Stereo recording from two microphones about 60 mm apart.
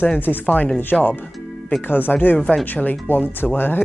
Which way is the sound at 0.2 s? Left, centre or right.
Left.